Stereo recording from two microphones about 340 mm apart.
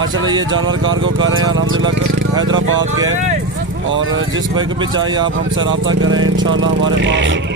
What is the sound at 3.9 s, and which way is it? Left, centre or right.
Speech, right.